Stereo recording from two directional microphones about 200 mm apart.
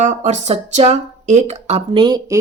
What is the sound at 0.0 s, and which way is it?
Speech, 35° right (ahead or behind).